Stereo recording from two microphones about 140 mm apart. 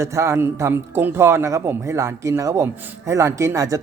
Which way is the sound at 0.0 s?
20° right (ahead or behind).